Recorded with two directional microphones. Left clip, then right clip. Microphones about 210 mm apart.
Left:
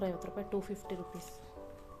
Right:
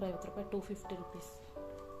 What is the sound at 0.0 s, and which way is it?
Speech, 25° left (ahead or behind).